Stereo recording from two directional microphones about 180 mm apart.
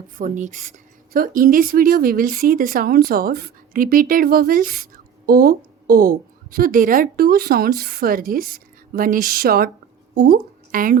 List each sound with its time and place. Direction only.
0.2 s speech: 45° right (ahead or behind)